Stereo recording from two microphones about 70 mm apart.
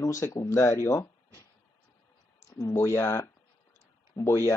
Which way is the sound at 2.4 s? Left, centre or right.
Left.